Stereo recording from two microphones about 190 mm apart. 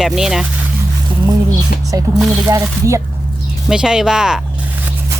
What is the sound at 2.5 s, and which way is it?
Speech, 15° right (ahead or behind).